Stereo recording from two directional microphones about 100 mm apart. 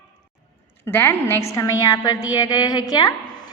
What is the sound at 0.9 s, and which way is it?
Speech, 20° left (ahead or behind).